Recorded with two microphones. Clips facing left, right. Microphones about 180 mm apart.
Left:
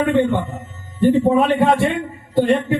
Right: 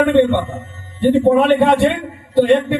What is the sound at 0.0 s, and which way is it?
Speech, 70° right (ahead or behind).